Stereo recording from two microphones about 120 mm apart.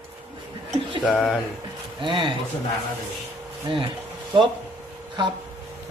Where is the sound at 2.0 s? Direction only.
45° right (ahead or behind).